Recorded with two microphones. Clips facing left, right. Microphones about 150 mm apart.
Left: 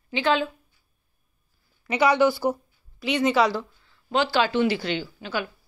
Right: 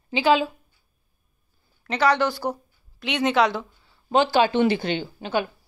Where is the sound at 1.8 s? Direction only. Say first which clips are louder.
Left 2 dB; 10° left (ahead or behind).